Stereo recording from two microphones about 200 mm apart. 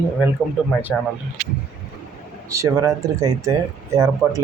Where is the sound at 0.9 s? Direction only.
5° left (ahead or behind).